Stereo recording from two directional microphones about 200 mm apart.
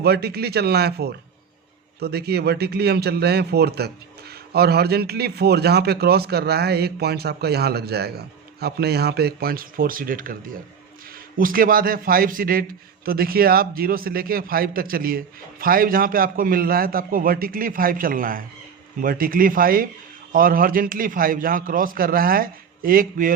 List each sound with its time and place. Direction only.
0.0 s a man's voice: 55° right (ahead or behind)